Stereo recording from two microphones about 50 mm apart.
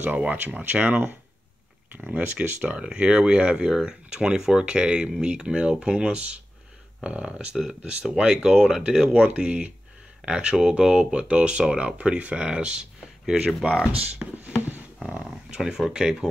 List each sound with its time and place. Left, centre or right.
0.0 s speech: right
7.3 s speech: centre
8.2 s speech: centre
14.2 s a sound: right
15.0 s speech: centre